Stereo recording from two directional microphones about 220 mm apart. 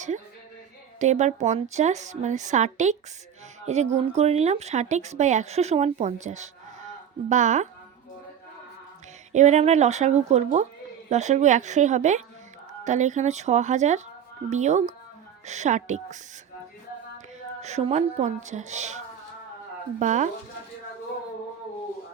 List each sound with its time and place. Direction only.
0.9 s speech: 30° right (ahead or behind)
9.3 s speech: 30° right (ahead or behind)
17.6 s speech: 30° right (ahead or behind)